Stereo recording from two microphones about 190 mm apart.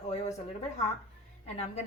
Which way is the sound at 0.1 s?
35° left (ahead or behind).